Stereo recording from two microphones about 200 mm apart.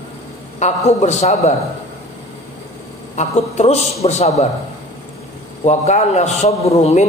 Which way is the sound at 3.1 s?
35° left (ahead or behind).